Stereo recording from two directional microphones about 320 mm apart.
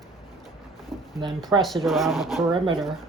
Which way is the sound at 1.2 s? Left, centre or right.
Centre.